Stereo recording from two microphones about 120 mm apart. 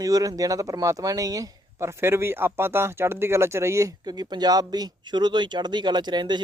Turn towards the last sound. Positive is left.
turn(degrees=-40)  # may be behind; listen again after turning